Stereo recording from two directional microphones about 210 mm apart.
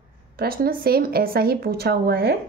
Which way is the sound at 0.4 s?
45° right (ahead or behind).